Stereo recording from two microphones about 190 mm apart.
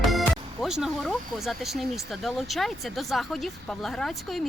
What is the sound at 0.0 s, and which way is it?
Speech, centre (ahead or behind).